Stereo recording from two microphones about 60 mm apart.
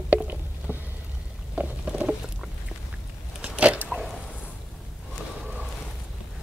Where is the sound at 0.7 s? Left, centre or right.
Left.